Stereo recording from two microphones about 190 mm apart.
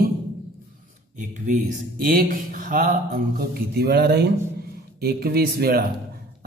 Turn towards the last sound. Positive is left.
turn(degrees=-55)  # may be behind; listen again after turning